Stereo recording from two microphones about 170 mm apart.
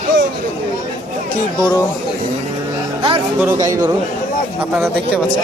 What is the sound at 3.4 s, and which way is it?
Speech, 20° right (ahead or behind).